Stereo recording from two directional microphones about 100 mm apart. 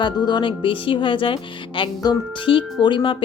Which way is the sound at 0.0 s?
50° left (ahead or behind).